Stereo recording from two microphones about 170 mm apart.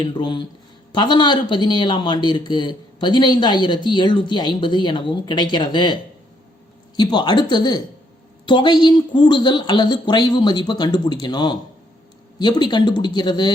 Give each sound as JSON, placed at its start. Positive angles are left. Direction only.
{"t": 0.0, "sound": "speech", "side_deg": 25}